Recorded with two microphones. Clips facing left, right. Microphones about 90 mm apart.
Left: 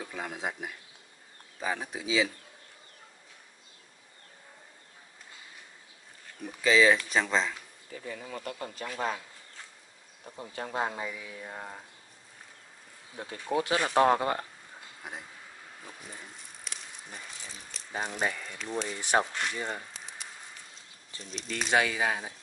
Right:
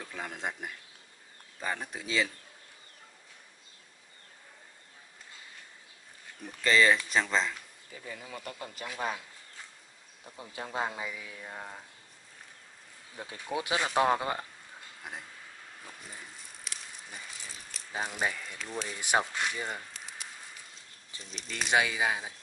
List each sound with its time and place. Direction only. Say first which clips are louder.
0.0 s speech: left 2 dB; 5° left (ahead or behind)
6.4 s speech: left 2 dB; centre (ahead or behind)
10.5 s speech: left 2 dB; centre (ahead or behind)
13.3 s speech: left 4 dB; 10° right (ahead or behind)
15.0 s speech: left 1 dB; centre (ahead or behind)
15.8 s a sound: left 2 dB; centre (ahead or behind)
18.9 s speech: left 1 dB; 15° right (ahead or behind)
19.6 s a sound: left 2 dB; centre (ahead or behind)
21.2 s speech: left 2 dB; centre (ahead or behind)